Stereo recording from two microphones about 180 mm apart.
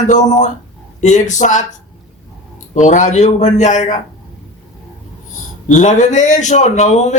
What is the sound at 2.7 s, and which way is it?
A man's voice, 45° left (ahead or behind).